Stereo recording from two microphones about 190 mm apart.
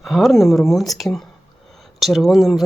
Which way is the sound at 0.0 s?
Centre (ahead or behind).